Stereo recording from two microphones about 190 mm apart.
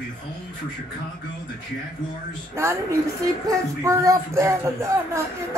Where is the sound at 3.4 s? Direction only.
15° right (ahead or behind).